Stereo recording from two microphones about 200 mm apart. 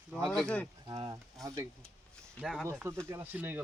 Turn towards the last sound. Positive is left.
turn(degrees=-10)  # may be behind; listen again after turning